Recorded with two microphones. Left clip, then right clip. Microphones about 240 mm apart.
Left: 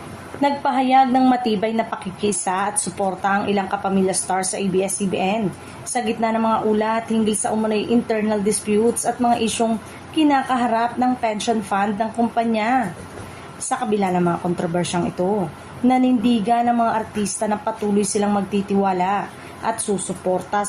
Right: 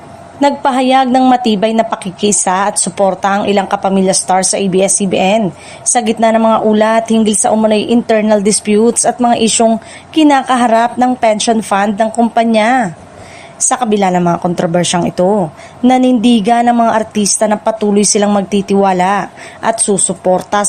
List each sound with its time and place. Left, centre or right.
0.4 s a woman's voice: right